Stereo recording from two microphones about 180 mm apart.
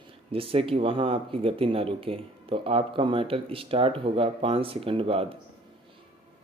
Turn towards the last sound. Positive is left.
turn(degrees=-30)  # may be behind; listen again after turning